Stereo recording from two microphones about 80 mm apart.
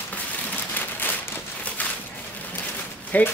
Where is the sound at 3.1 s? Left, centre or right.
Left.